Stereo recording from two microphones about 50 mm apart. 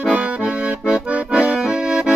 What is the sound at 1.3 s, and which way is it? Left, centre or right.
Accordion, centre.